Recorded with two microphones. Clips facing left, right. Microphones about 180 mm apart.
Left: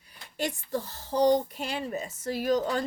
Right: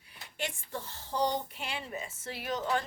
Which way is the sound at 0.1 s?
40° left (ahead or behind).